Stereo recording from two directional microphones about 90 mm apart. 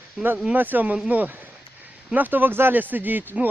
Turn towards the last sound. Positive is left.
turn(degrees=-20)  # may be behind; listen again after turning